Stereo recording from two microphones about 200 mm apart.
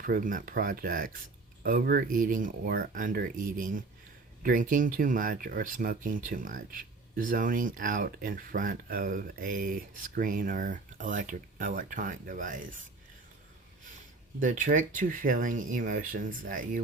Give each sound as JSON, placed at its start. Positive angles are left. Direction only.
{"t": 0.0, "sound": "speech", "side_deg": -45}
{"t": 14.3, "sound": "speech", "side_deg": -40}